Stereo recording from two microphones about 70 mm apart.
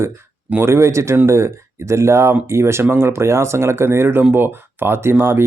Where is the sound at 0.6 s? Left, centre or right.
Right.